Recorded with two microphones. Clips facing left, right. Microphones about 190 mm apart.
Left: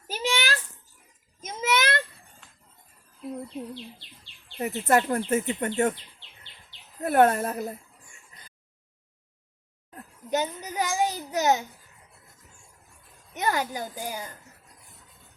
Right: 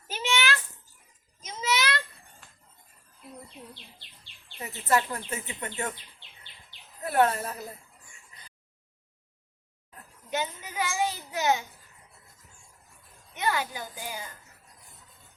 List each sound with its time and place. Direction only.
0.1 s a sound: 35° left (ahead or behind)
1.4 s a sound: 50° left (ahead or behind)
4.5 s speech: 50° left (ahead or behind)
7.0 s speech: 50° left (ahead or behind)
9.9 s a child's voice: 40° left (ahead or behind)
13.3 s speech: 45° left (ahead or behind)